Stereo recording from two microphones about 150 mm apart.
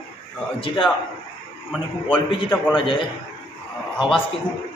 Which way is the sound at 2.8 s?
35° left (ahead or behind).